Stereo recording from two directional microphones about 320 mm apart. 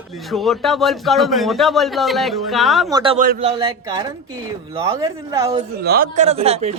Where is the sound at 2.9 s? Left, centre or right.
Centre.